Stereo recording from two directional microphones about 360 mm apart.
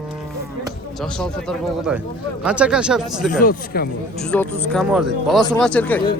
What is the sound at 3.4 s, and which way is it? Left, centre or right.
Speech, left.